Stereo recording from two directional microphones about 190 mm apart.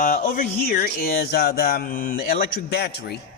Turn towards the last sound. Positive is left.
turn(degrees=55)  # may be behind; listen again after turning